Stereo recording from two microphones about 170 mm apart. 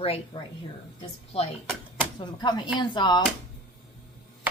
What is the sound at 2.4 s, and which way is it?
Speech, 25° left (ahead or behind).